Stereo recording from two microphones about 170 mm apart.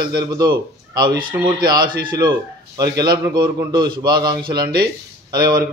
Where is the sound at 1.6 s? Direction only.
25° right (ahead or behind).